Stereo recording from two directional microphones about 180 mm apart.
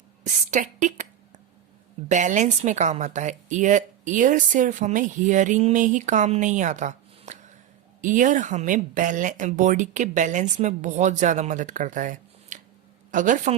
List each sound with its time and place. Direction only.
0.5 s a woman's voice: 45° right (ahead or behind)
2.0 s a woman's voice: 45° right (ahead or behind)